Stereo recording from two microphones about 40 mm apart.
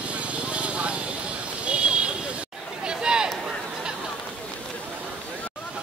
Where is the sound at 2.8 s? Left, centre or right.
Right.